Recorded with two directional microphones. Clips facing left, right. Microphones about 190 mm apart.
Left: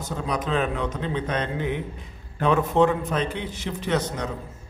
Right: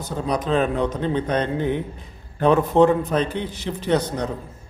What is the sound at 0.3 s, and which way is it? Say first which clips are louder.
A man's voice: right 4 dB; 35° right (ahead or behind).